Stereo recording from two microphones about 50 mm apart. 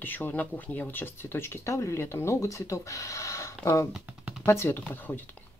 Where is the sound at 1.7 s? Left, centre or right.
Left.